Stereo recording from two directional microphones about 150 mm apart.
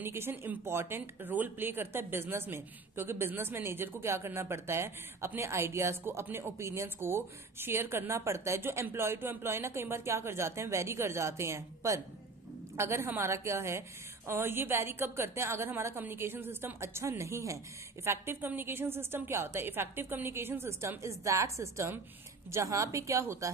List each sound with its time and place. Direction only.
0.0 s a woman's voice: 15° right (ahead or behind)